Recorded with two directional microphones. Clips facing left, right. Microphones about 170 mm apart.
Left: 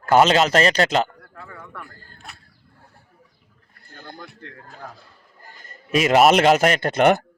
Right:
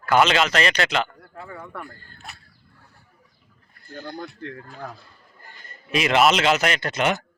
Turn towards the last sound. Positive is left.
turn(degrees=55)  # may be behind; listen again after turning